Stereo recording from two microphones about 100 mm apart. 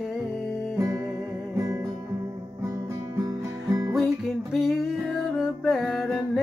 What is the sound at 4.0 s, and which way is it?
Music, centre (ahead or behind).